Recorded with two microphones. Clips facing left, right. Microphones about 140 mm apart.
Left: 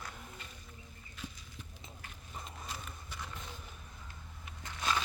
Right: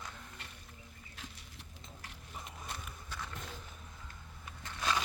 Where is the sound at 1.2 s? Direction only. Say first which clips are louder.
Left 5 dB; 80° right.